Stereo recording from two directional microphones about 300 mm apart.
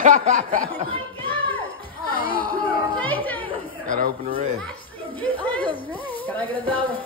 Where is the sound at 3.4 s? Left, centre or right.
Right.